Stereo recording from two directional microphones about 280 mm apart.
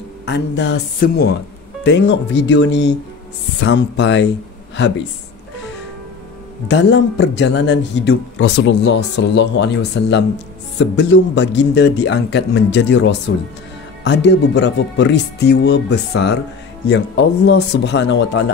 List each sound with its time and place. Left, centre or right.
0.2 s speech: left
6.7 s speech: left